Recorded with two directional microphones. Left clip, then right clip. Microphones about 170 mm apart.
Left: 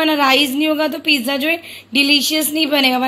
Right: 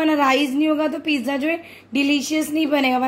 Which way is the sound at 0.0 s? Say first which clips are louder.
Left 4 dB; 5° right (ahead or behind).